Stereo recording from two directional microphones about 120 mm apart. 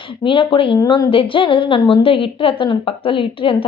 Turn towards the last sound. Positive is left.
turn(degrees=50)  # may be behind; listen again after turning